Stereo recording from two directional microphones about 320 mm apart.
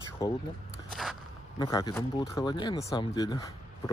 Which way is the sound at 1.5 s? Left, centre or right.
Centre.